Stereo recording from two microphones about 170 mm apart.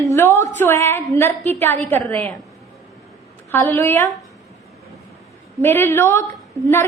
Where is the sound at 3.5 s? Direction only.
10° left (ahead or behind).